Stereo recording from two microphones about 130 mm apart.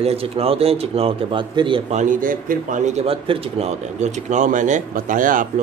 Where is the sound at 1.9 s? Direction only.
80° right.